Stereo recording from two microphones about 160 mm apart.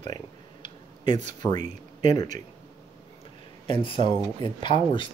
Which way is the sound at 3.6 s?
30° left (ahead or behind).